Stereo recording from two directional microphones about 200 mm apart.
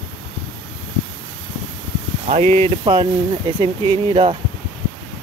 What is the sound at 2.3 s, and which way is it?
Speech, 30° right (ahead or behind).